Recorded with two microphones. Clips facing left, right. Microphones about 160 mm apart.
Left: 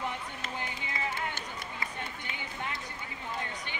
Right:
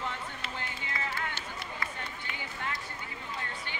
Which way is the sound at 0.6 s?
20° left (ahead or behind).